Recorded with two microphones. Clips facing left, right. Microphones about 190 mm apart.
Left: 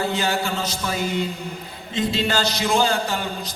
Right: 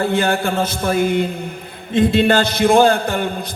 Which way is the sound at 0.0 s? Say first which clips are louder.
Right 6 dB; 55° right (ahead or behind).